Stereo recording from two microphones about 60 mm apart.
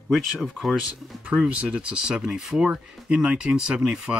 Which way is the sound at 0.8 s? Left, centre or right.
Centre.